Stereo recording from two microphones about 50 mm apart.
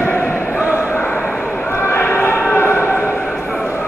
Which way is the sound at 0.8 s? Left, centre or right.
Left.